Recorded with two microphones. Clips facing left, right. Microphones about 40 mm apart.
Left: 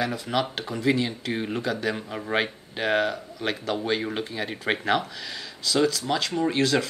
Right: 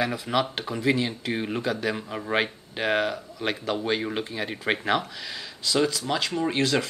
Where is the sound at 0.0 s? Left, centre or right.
Centre.